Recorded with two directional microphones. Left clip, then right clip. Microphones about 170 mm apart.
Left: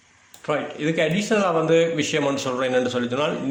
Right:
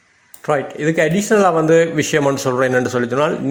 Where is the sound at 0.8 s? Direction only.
55° right (ahead or behind).